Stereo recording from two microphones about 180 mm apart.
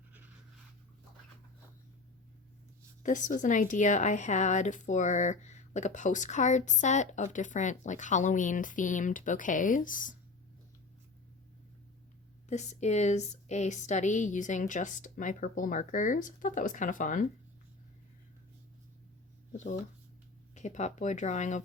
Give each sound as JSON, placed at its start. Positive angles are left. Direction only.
{"t": 3.0, "sound": "a woman's voice", "side_deg": 45}
{"t": 12.5, "sound": "a woman's voice", "side_deg": 40}
{"t": 20.6, "sound": "speech", "side_deg": 40}